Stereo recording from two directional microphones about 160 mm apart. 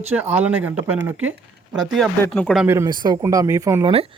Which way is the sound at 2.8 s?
25° right (ahead or behind).